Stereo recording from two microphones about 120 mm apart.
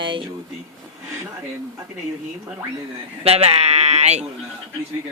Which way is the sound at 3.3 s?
55° right (ahead or behind).